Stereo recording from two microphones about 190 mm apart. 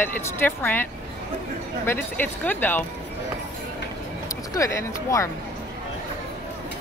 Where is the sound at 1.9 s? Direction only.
10° left (ahead or behind).